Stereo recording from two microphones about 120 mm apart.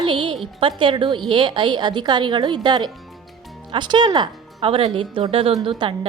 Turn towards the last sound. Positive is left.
turn(degrees=-40)  # may be behind; listen again after turning